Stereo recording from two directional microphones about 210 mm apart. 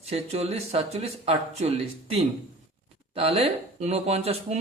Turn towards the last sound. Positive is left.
turn(degrees=-30)  # may be behind; listen again after turning